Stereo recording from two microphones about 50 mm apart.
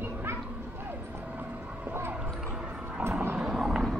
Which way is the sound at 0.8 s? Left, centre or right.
Right.